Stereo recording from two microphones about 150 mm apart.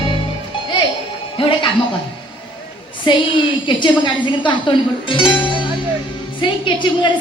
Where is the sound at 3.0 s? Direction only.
35° left (ahead or behind).